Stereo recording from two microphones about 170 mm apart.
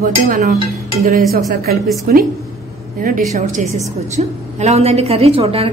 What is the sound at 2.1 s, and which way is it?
A woman's voice, 60° right (ahead or behind).